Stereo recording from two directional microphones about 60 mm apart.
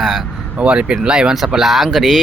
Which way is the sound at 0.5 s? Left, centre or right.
Right.